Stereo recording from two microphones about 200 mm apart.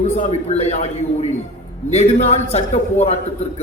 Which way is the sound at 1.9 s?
35° left (ahead or behind).